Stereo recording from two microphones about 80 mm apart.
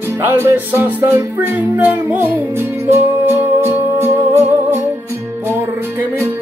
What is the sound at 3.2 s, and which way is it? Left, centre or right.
Music, right.